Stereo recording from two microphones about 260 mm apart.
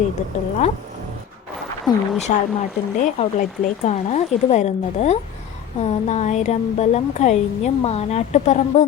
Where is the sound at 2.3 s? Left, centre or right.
Left.